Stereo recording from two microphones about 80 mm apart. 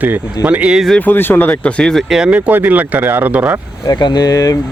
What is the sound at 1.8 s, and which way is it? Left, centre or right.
Speech, centre.